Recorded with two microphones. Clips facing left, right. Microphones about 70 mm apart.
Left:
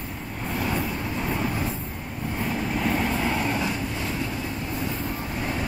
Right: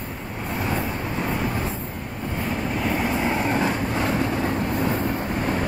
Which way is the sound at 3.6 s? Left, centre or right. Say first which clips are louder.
Right 5 dB; right.